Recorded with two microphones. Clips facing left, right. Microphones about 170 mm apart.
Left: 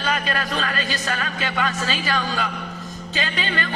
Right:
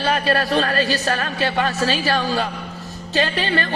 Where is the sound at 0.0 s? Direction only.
35° right (ahead or behind).